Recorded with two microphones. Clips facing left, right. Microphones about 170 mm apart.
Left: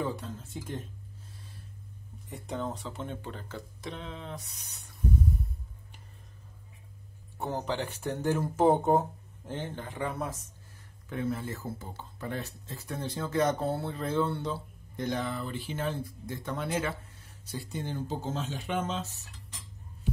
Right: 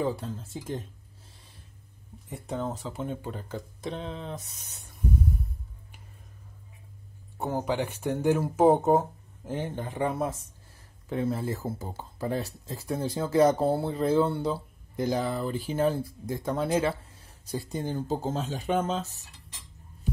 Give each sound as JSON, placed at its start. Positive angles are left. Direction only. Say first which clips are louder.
{"t": 0.0, "sound": "speech", "louder": "right 4 dB", "side_deg": -35}
{"t": 2.2, "sound": "speech", "louder": "right 3 dB", "side_deg": -5}
{"t": 3.8, "sound": "speech", "louder": "right 5 dB", "side_deg": -30}
{"t": 7.3, "sound": "speech", "louder": "right 4 dB", "side_deg": -10}
{"t": 11.1, "sound": "speech", "louder": "right 4 dB", "side_deg": -30}